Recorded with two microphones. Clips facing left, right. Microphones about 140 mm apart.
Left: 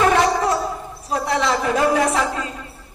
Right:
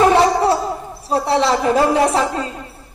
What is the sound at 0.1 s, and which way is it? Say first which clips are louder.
Laughter: right 4 dB; 30° right (ahead or behind).